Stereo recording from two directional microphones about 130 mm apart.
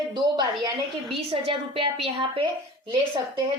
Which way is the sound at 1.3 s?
45° right (ahead or behind).